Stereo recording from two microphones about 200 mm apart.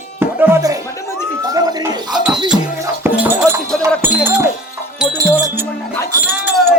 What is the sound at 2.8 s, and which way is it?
Music, 10° right (ahead or behind).